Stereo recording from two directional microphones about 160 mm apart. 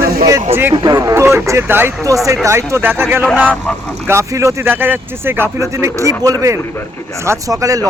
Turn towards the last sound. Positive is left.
turn(degrees=-20)  # may be behind; listen again after turning